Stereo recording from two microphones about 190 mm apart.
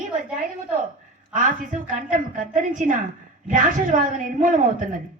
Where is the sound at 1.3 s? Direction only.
45° right (ahead or behind).